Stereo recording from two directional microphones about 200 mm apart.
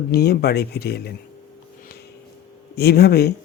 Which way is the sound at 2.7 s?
55° left (ahead or behind).